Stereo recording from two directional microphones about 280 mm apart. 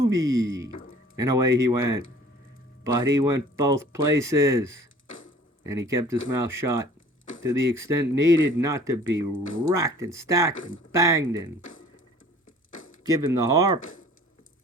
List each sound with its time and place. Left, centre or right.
0.0 s speech: centre
5.0 s a sound: left
5.6 s speech: centre
10.5 s speech: left
10.9 s speech: centre
11.6 s a sound: left
13.0 s speech: centre